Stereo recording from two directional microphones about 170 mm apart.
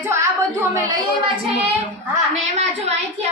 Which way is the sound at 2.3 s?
40° right (ahead or behind).